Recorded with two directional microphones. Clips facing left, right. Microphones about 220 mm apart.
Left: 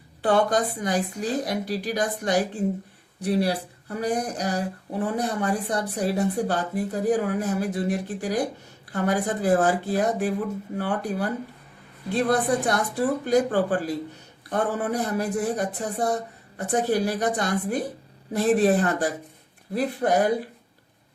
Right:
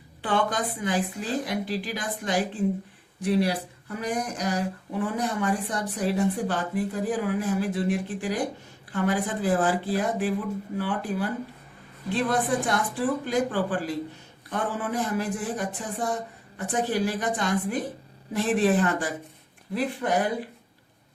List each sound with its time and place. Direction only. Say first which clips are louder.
0.2 s speech: left 5 dB; 40° left (ahead or behind)